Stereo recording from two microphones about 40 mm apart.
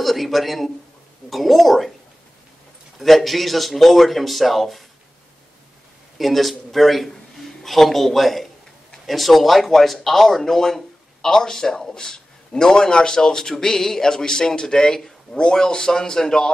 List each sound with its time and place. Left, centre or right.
0.0 s speech: centre
3.0 s speech: centre
6.1 s a man's voice: centre